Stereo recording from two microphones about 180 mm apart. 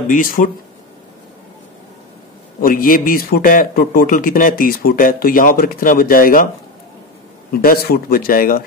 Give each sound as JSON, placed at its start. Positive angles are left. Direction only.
{"t": 0.1, "sound": "speech", "side_deg": 50}
{"t": 2.6, "sound": "speech", "side_deg": 50}
{"t": 7.6, "sound": "speech", "side_deg": 55}